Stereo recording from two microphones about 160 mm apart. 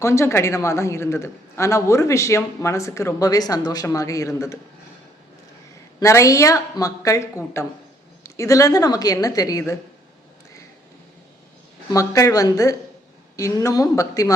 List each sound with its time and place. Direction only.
0.0 s a woman's voice: 15° left (ahead or behind)
6.0 s a woman's voice: 20° left (ahead or behind)
11.9 s a woman's voice: 20° left (ahead or behind)